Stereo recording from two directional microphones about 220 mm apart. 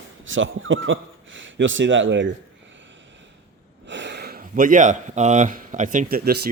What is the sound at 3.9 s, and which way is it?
Speech, 55° right (ahead or behind).